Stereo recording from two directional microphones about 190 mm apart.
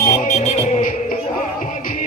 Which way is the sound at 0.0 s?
40° left (ahead or behind).